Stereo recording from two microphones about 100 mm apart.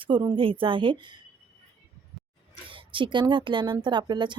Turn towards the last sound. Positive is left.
turn(degrees=-50)  # may be behind; listen again after turning